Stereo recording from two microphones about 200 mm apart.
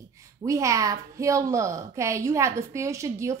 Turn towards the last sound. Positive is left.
turn(degrees=-15)  # may be behind; listen again after turning